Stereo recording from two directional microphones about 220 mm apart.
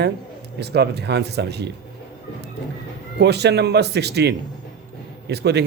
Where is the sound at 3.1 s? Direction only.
50° right (ahead or behind).